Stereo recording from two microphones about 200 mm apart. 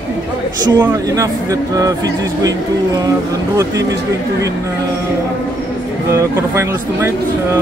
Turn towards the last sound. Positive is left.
turn(degrees=-15)  # may be behind; listen again after turning